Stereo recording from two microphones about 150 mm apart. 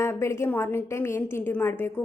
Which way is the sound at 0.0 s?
20° left (ahead or behind).